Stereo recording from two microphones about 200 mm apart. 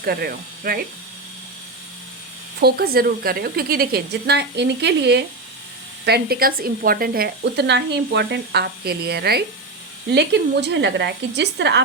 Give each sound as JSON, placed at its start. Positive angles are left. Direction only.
{"t": 0.0, "sound": "speech", "side_deg": -50}
{"t": 2.6, "sound": "a woman's voice", "side_deg": -50}